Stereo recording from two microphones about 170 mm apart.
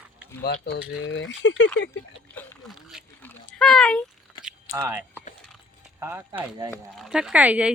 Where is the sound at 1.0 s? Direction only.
90° left.